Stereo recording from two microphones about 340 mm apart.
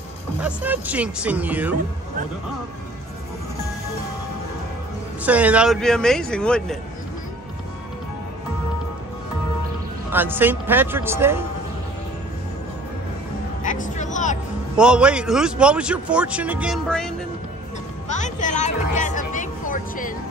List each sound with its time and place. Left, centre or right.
0.4 s a man's voice: centre
5.2 s a man's voice: centre
10.1 s speech: centre
13.6 s speech: left
14.8 s a man's voice: centre
18.0 s music: left